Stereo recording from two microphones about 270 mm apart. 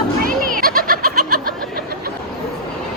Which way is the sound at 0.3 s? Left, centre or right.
Right.